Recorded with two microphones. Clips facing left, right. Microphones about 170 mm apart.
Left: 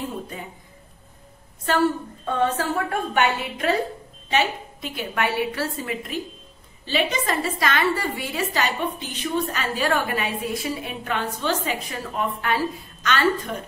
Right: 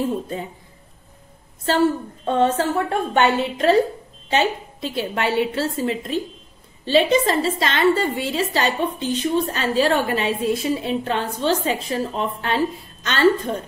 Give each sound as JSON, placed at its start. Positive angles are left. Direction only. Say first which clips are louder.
{"t": 2.2, "sound": "a woman's voice", "louder": "right 4 dB", "side_deg": -25}